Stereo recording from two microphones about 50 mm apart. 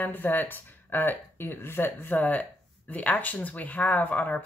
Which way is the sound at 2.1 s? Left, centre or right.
Left.